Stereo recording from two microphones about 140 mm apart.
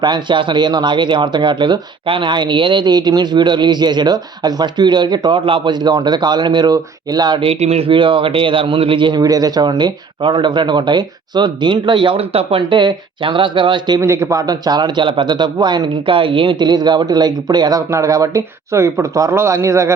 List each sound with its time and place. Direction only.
0.0 s speech: 35° right (ahead or behind)
14.0 s a man's voice: 20° right (ahead or behind)